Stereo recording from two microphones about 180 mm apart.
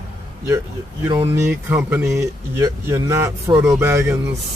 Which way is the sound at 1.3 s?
10° right (ahead or behind).